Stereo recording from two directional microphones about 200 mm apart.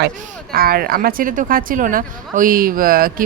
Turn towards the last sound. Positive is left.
turn(degrees=-45)  # may be behind; listen again after turning